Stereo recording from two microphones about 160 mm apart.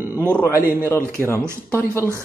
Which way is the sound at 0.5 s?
15° right (ahead or behind).